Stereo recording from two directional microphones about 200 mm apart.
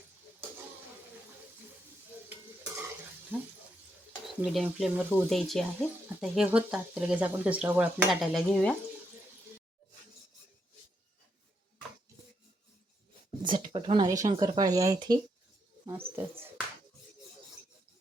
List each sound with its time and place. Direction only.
3.3 s speech: 10° right (ahead or behind)
13.4 s speech: 25° right (ahead or behind)